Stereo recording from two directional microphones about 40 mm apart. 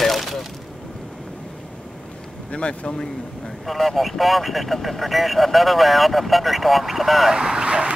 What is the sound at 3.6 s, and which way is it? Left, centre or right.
Speech, centre.